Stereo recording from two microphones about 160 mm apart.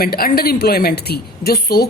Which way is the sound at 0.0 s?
70° left (ahead or behind).